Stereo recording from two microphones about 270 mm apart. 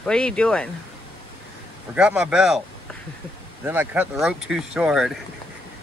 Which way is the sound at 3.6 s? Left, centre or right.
Centre.